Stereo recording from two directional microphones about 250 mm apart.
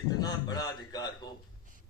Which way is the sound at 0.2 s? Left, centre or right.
Centre.